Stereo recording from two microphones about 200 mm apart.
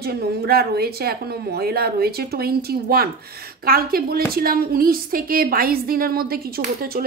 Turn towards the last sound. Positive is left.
turn(degrees=-50)  # may be behind; listen again after turning